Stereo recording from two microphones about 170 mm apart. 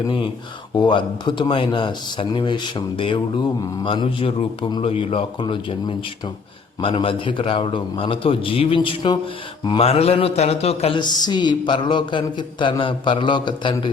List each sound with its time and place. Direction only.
0.7 s speech: 30° left (ahead or behind)